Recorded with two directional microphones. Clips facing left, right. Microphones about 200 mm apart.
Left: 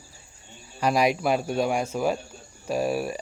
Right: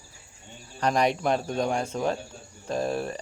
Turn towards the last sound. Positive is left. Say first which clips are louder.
# left 2 dB
turn(degrees=10)  # may be behind; listen again after turning